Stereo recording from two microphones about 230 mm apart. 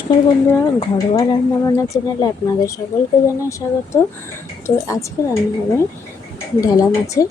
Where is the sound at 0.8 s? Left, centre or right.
Centre.